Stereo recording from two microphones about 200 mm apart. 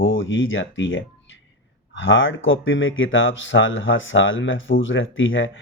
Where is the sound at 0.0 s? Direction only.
75° left (ahead or behind).